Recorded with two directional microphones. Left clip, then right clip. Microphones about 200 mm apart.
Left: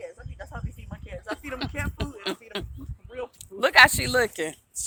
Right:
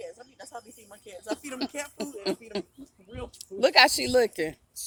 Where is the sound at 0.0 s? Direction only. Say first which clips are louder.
Left 2 dB; 20° right (ahead or behind).